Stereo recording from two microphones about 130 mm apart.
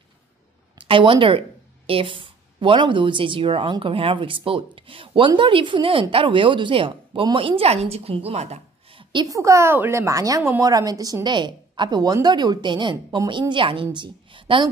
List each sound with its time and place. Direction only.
0.7 s a woman's voice: 40° right (ahead or behind)
9.1 s a woman's voice: 30° right (ahead or behind)